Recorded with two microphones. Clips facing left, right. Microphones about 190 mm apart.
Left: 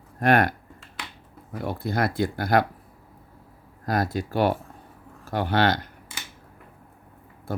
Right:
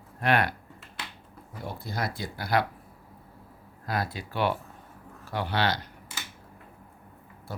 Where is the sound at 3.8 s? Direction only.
45° left (ahead or behind).